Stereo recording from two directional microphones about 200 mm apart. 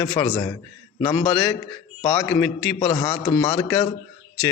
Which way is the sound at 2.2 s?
5° left (ahead or behind).